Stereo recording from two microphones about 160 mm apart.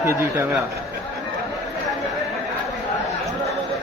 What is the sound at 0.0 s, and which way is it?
Speech, 15° right (ahead or behind).